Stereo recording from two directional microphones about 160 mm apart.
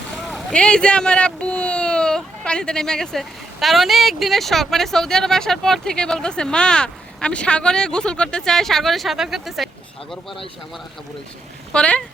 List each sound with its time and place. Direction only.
0.2 s speech: 5° left (ahead or behind)
11.7 s speech: 5° left (ahead or behind)